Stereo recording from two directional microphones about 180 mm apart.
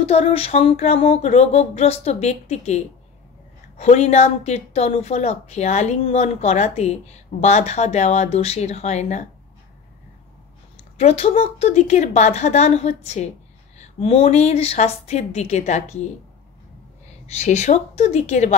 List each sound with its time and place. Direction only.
0.0 s a woman's voice: 35° left (ahead or behind)
11.0 s a woman's voice: 35° left (ahead or behind)
17.3 s a woman's voice: 40° left (ahead or behind)